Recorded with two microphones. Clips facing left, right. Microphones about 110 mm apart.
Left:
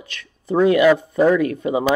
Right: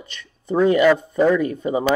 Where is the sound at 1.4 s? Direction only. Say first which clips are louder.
Left 2 dB; 70° left (ahead or behind).